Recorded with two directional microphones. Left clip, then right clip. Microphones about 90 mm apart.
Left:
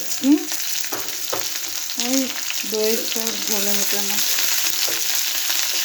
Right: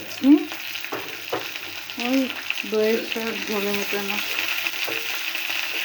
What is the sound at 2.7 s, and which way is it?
Speech, 40° left (ahead or behind).